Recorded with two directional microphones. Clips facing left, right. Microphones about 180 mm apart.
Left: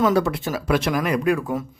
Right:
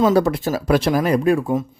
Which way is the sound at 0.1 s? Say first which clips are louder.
Right 4 dB; 40° right (ahead or behind).